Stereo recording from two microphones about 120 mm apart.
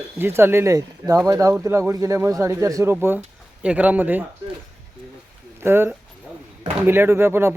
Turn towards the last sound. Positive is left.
turn(degrees=-20)  # may be behind; listen again after turning